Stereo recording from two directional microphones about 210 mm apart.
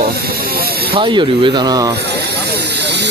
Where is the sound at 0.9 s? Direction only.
25° right (ahead or behind).